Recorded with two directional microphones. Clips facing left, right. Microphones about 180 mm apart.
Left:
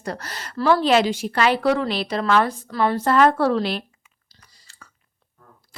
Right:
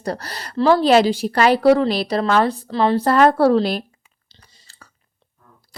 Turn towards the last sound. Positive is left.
turn(degrees=-35)  # may be behind; listen again after turning